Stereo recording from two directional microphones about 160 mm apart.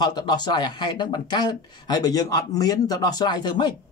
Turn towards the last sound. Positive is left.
turn(degrees=25)  # may be behind; listen again after turning